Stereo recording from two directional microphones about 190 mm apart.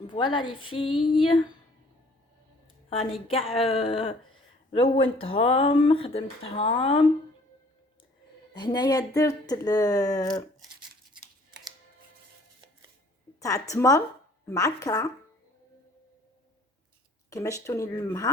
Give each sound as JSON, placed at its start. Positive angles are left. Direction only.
{"t": 0.3, "sound": "speech", "side_deg": 25}
{"t": 2.9, "sound": "speech", "side_deg": 30}
{"t": 8.5, "sound": "speech", "side_deg": 20}
{"t": 13.4, "sound": "speech", "side_deg": 15}
{"t": 17.2, "sound": "speech", "side_deg": 15}